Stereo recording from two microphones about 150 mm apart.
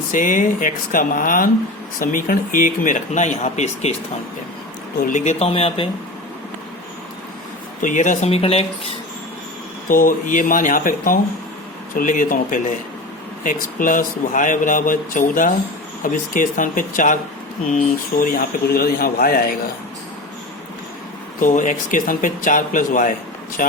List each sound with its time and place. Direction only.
0.1 s speech: 60° left (ahead or behind)
5.0 s speech: 50° left (ahead or behind)
7.8 s speech: 60° left (ahead or behind)
8.3 s speech: 40° left (ahead or behind)
9.9 s speech: 65° left (ahead or behind)
21.4 s speech: 60° left (ahead or behind)